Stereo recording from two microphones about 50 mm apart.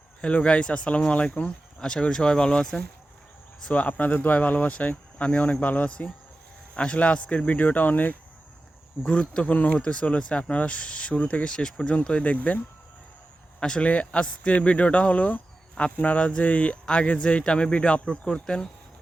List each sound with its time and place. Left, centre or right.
0.2 s speech: left
3.8 s speech: left
9.0 s speech: left
11.4 s speech: centre
11.8 s speech: left
13.6 s a man's voice: centre
13.8 s speech: left